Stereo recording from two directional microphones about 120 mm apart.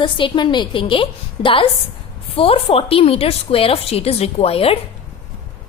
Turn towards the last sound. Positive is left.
turn(degrees=55)  # may be behind; listen again after turning